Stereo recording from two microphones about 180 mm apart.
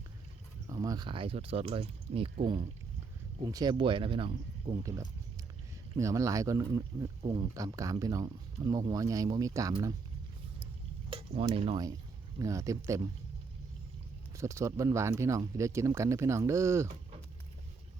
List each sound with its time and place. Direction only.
0.7 s speech: 20° right (ahead or behind)
4.8 s speech: 20° right (ahead or behind)
11.1 s speech: 30° right (ahead or behind)
14.3 s speech: 15° right (ahead or behind)